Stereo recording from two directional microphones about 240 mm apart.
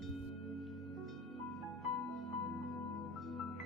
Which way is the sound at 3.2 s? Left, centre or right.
Centre.